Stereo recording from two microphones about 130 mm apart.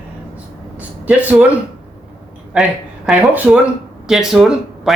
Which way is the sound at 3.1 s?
10° right (ahead or behind).